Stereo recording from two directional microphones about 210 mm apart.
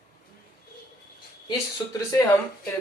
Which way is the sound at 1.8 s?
15° left (ahead or behind).